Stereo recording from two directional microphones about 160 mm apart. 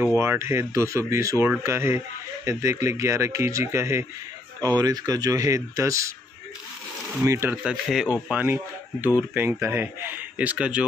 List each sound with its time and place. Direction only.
0.2 s speech: 15° right (ahead or behind)
7.2 s speech: 15° right (ahead or behind)
7.5 s speech: 5° right (ahead or behind)